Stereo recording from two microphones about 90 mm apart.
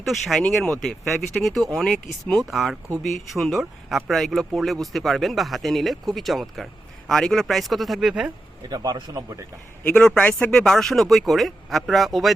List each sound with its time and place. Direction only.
0.0 s speech: centre (ahead or behind)
8.7 s speech: 50° right (ahead or behind)
9.8 s a man's voice: 15° left (ahead or behind)